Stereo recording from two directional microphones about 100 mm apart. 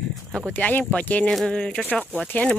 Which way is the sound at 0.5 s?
15° left (ahead or behind).